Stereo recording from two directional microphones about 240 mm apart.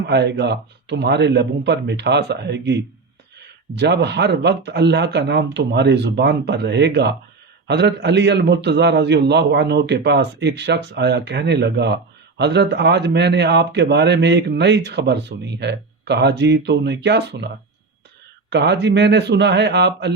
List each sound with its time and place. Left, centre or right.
0.1 s a man's voice: right
18.5 s a man's voice: right